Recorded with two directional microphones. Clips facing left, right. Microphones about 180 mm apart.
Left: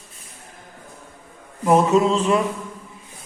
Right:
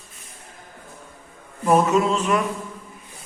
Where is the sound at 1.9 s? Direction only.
30° left (ahead or behind).